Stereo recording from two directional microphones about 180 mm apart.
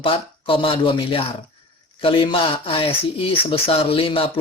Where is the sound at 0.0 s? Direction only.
30° left (ahead or behind).